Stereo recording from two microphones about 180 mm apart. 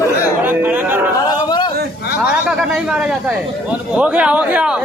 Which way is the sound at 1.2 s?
20° left (ahead or behind).